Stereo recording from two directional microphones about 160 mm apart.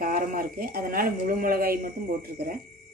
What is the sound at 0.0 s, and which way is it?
Speech, 60° right (ahead or behind).